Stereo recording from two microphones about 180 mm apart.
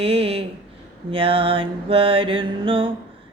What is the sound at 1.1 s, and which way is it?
Mantra, 30° right (ahead or behind).